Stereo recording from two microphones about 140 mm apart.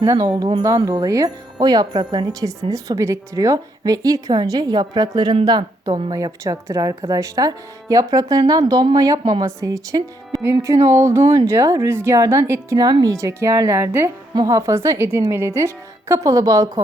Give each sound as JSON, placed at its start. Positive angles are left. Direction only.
{"t": 0.1, "sound": "a woman's voice", "side_deg": -25}